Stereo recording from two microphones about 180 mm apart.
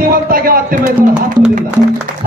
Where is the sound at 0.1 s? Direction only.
55° right (ahead or behind).